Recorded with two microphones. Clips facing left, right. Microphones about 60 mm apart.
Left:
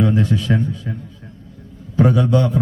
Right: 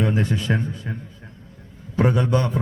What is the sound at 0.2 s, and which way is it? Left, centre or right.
Speech, right.